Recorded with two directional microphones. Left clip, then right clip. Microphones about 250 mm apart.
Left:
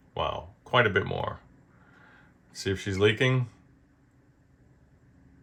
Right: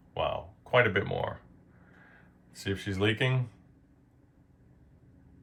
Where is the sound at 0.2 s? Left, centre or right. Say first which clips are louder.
Left 1 dB; left.